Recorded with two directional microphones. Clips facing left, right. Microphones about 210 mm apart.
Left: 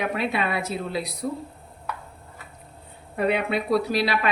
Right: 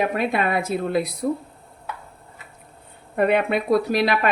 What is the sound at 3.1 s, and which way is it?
Speech, 55° right (ahead or behind).